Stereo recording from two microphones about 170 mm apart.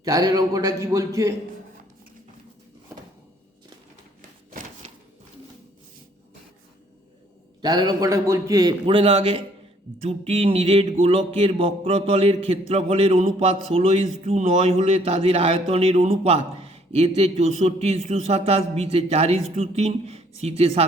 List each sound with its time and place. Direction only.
0.0 s a man's voice: 20° right (ahead or behind)
7.6 s a man's voice: 25° right (ahead or behind)